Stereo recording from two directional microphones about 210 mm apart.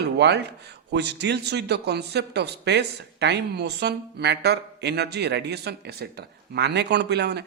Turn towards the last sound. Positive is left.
turn(degrees=-55)  # may be behind; listen again after turning